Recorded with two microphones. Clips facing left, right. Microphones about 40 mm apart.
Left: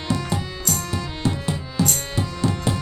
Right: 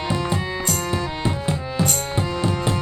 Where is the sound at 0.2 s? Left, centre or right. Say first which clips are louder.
Right 4 dB; right.